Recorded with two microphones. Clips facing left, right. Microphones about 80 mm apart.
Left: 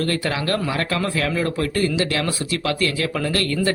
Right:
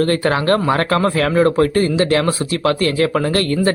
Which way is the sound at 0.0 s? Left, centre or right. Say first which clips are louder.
Right 7 dB; right.